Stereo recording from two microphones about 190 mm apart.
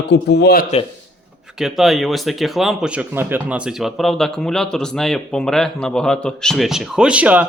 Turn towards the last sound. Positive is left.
turn(degrees=-10)  # may be behind; listen again after turning